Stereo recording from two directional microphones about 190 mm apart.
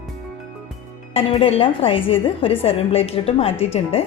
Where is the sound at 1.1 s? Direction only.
30° left (ahead or behind).